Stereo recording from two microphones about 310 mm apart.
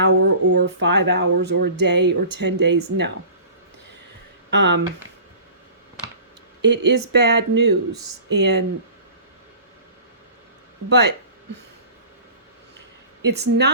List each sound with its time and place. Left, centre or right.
0.0 s speech: right
4.5 s speech: right
6.6 s speech: right
10.8 s speech: right
13.2 s speech: right